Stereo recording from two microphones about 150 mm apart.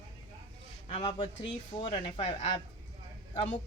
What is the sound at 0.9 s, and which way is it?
A woman's voice, 30° left (ahead or behind).